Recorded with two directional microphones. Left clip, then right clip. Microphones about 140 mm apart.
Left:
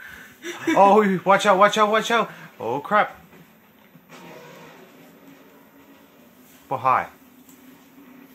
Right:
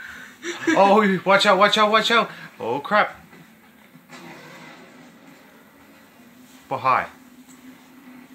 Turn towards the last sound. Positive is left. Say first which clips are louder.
# even
turn(degrees=30)  # may be behind; listen again after turning